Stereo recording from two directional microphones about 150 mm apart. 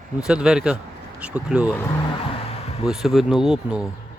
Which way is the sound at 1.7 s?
20° left (ahead or behind).